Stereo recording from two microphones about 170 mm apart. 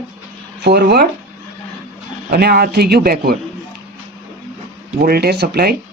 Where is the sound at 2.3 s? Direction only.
65° right (ahead or behind).